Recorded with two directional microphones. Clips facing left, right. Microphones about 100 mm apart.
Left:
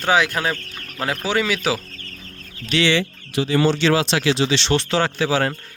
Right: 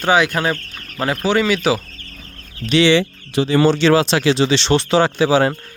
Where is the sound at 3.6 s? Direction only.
40° right (ahead or behind).